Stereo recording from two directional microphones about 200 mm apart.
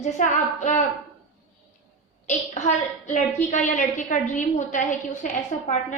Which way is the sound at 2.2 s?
35° left (ahead or behind).